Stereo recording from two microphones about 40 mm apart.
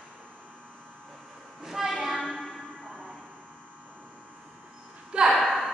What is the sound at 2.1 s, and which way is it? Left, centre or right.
Music, centre.